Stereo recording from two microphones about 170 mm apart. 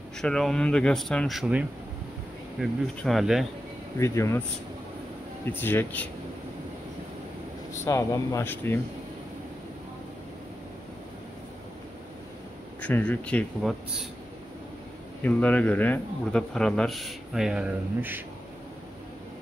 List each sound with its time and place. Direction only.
0.2 s speech: 5° left (ahead or behind)
4.0 s speech: 15° left (ahead or behind)
5.4 s speech: 15° left (ahead or behind)
7.8 s speech: 20° left (ahead or behind)
12.8 s speech: 10° left (ahead or behind)
15.2 s speech: 10° left (ahead or behind); by 18.2 s 10° right (ahead or behind)